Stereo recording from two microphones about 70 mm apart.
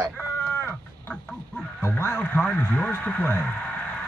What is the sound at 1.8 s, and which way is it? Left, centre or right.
Speech, left.